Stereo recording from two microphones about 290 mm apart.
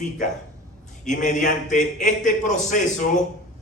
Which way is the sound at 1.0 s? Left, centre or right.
Left.